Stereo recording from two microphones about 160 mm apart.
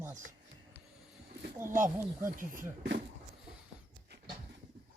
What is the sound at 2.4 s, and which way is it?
Speech, 55° right (ahead or behind).